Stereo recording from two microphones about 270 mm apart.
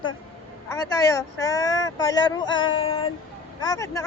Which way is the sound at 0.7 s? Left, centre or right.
Centre.